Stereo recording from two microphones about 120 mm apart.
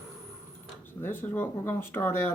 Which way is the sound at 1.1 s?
20° left (ahead or behind).